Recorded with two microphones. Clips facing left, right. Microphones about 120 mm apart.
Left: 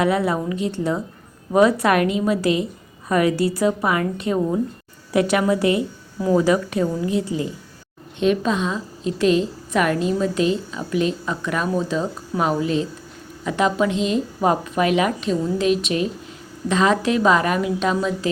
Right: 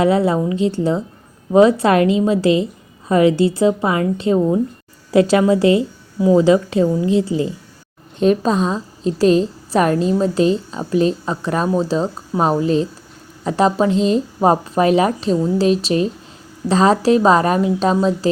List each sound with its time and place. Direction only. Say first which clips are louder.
0.0 s a woman's voice: right 5 dB; 30° right (ahead or behind)